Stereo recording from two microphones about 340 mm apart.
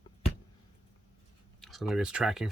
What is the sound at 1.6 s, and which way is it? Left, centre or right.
Speech, centre.